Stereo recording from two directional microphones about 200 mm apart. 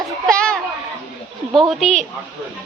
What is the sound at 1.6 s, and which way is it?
Speech, centre (ahead or behind).